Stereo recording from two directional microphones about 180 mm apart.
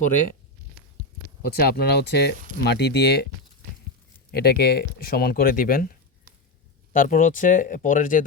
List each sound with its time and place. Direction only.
1.5 s speech: 60° left (ahead or behind)
4.3 s speech: 60° left (ahead or behind)